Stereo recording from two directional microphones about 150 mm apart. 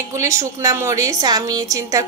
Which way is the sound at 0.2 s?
20° right (ahead or behind).